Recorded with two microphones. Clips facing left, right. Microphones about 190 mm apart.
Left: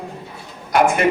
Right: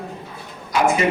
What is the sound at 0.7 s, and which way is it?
Speech, 55° left (ahead or behind).